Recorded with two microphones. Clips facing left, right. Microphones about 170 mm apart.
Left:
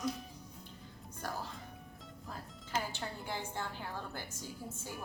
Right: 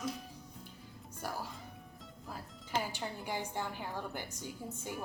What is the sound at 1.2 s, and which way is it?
Music, 10° right (ahead or behind).